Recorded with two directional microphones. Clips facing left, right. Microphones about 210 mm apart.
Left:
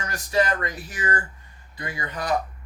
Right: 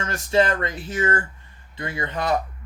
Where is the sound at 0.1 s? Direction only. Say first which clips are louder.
Right 3 dB; 25° right (ahead or behind).